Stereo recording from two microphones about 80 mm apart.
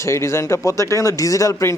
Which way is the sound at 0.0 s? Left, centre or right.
Left.